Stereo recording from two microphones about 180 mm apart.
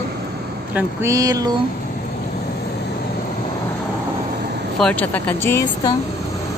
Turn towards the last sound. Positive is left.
turn(degrees=15)  # may be behind; listen again after turning